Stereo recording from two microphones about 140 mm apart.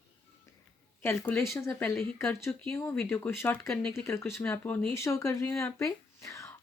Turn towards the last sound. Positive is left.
turn(degrees=20)  # may be behind; listen again after turning